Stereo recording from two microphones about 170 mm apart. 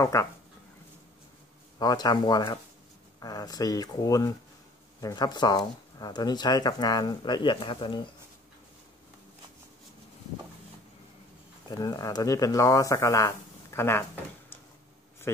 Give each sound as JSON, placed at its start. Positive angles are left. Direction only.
{"t": 0.0, "sound": "speech", "side_deg": 15}
{"t": 1.8, "sound": "speech", "side_deg": 25}
{"t": 11.7, "sound": "speech", "side_deg": 20}
{"t": 15.3, "sound": "speech", "side_deg": 15}